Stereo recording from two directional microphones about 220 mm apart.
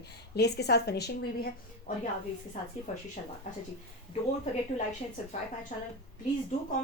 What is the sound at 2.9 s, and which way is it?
Speech, 30° left (ahead or behind).